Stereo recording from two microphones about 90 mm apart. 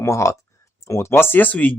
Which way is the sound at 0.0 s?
35° left (ahead or behind).